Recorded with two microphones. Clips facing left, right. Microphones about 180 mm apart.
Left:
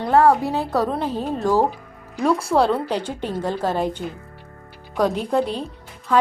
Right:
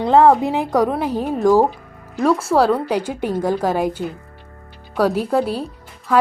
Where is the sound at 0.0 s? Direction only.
20° right (ahead or behind).